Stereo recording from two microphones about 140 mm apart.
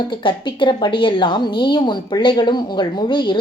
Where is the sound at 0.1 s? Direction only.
35° left (ahead or behind).